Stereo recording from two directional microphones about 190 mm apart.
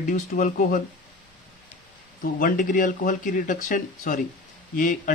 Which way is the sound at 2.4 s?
45° left (ahead or behind).